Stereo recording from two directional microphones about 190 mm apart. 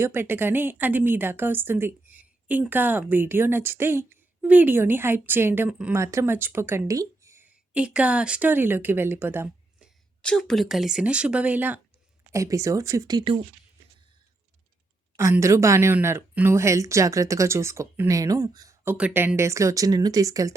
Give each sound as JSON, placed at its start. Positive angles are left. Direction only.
{"t": 0.0, "sound": "a woman's voice", "side_deg": -10}
{"t": 10.2, "sound": "a woman's voice", "side_deg": 5}
{"t": 15.1, "sound": "a woman's voice", "side_deg": -15}